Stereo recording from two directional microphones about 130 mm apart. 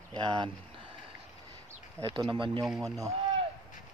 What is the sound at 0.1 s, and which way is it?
Speech, 35° right (ahead or behind).